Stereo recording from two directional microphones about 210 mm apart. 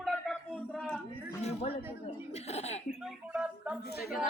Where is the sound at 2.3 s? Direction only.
30° left (ahead or behind).